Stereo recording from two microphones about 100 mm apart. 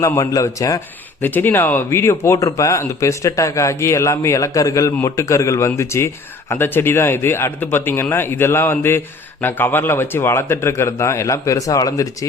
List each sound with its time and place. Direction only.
0.2 s speech: 35° left (ahead or behind)
1.2 s speech: 20° left (ahead or behind); by 12.0 s 35° left (ahead or behind)